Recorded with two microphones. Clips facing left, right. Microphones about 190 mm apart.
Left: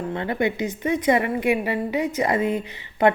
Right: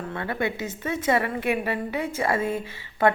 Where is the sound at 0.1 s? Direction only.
20° left (ahead or behind).